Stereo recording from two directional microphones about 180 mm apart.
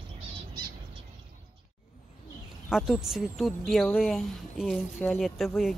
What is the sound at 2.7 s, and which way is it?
Speech, centre (ahead or behind).